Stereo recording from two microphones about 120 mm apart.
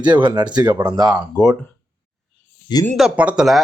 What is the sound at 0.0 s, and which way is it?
Speech, 40° right (ahead or behind).